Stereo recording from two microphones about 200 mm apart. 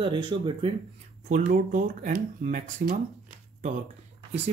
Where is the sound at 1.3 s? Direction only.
45° right (ahead or behind).